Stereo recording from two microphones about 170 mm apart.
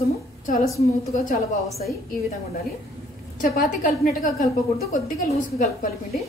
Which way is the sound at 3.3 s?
60° left (ahead or behind).